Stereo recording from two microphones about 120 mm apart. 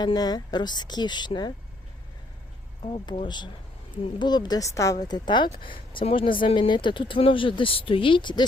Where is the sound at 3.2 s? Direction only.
40° left (ahead or behind).